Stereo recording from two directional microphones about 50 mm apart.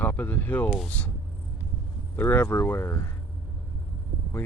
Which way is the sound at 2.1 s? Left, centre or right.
Left.